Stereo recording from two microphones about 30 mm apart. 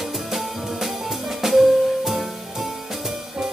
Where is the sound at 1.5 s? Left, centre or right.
Centre.